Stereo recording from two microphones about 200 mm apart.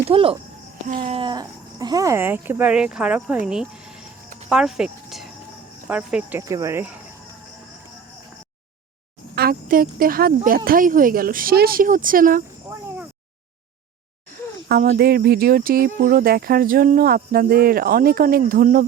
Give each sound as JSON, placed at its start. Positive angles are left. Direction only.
{"t": 0.0, "sound": "speech", "side_deg": -25}
{"t": 4.4, "sound": "cricket", "side_deg": 0}
{"t": 5.9, "sound": "speech", "side_deg": -5}
{"t": 9.3, "sound": "speech", "side_deg": -50}
{"t": 14.7, "sound": "speech", "side_deg": -50}